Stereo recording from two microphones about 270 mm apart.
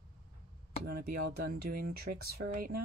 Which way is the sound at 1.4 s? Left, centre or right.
Right.